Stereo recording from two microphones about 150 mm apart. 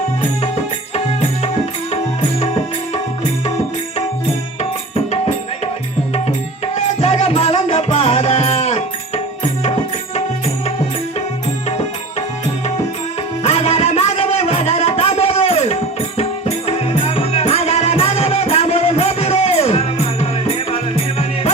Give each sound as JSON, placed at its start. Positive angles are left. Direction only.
{"t": 4.9, "sound": "music", "side_deg": 40}
{"t": 6.7, "sound": "music", "side_deg": 45}
{"t": 13.4, "sound": "music", "side_deg": 45}